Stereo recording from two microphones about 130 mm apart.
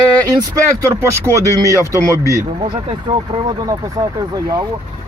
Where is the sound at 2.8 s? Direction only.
40° right (ahead or behind).